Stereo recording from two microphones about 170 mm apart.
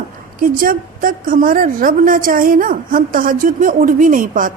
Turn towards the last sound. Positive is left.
turn(degrees=-50)  # may be behind; listen again after turning